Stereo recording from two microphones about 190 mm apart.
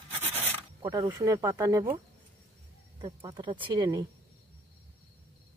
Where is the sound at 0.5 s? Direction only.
15° right (ahead or behind).